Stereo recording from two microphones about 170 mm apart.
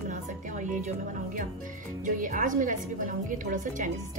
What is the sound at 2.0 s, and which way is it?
Speech, 50° right (ahead or behind).